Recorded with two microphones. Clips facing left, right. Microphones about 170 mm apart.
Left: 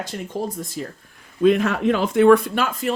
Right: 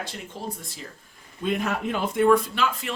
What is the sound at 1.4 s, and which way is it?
Speech, 90° left.